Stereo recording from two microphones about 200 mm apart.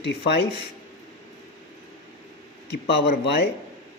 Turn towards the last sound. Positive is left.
turn(degrees=55)  # may be behind; listen again after turning